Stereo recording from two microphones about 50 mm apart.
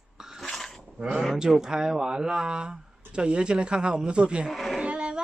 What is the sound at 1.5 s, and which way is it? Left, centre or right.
A man's voice, centre.